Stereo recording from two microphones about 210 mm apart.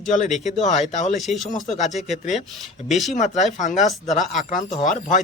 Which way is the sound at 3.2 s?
35° left (ahead or behind).